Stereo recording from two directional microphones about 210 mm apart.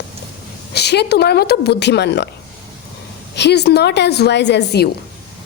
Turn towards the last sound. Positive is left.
turn(degrees=50)  # may be behind; listen again after turning